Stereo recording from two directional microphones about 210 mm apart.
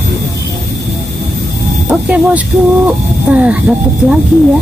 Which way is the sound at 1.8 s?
5° right (ahead or behind).